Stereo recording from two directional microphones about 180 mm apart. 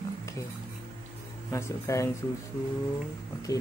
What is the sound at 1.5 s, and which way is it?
Speech, 15° left (ahead or behind).